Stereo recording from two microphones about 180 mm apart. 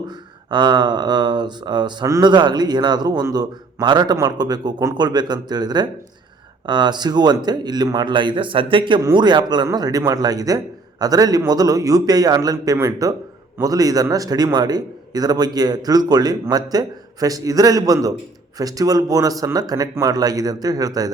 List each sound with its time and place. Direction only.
0.5 s speech: 25° right (ahead or behind)